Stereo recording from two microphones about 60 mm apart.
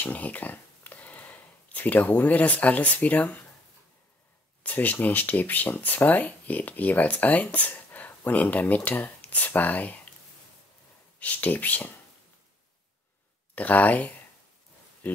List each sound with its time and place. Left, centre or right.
0.0 s a sound: left
2.1 s speech: left
4.6 s speech: left
11.1 s speech: left
13.6 s speech: left